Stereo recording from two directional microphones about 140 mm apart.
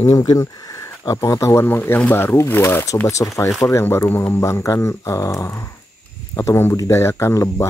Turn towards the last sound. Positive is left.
turn(degrees=20)  # may be behind; listen again after turning